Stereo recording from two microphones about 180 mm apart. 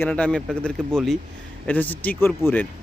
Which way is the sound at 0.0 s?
5° left (ahead or behind).